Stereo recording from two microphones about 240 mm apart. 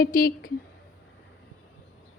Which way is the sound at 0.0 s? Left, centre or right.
Left.